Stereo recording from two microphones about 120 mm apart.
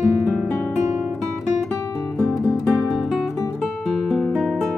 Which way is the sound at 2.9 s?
5° right (ahead or behind).